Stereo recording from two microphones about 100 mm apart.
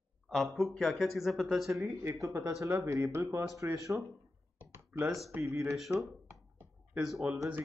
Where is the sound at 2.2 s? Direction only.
30° right (ahead or behind).